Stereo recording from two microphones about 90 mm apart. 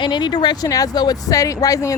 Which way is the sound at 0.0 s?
60° left (ahead or behind).